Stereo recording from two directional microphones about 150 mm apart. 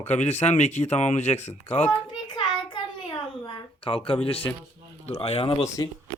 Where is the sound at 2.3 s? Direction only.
30° left (ahead or behind).